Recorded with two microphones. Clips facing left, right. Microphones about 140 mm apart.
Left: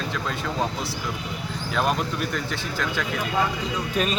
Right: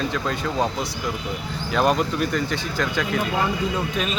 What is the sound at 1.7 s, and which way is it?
Speech, centre (ahead or behind).